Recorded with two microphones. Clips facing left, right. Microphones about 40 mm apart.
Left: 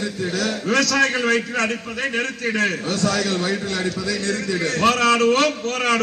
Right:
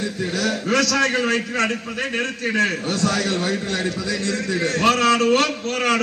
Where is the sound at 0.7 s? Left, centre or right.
Left.